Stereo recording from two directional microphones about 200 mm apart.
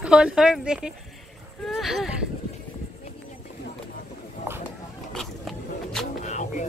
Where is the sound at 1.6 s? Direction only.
Centre (ahead or behind).